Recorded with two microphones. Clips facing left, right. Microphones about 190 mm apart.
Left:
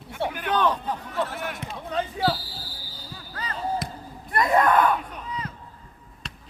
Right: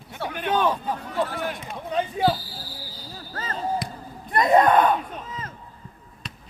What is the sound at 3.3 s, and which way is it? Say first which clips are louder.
Basketball bounce: right 2 dB; 45° right (ahead or behind).